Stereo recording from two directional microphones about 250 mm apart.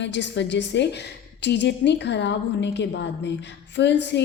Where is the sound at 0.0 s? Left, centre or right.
Left.